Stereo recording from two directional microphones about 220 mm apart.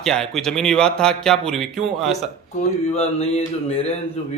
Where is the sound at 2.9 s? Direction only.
30° left (ahead or behind).